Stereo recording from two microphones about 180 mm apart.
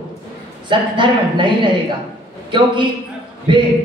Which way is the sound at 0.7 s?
25° right (ahead or behind).